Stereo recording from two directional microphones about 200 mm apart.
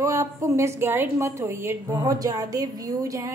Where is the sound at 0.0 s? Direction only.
15° right (ahead or behind).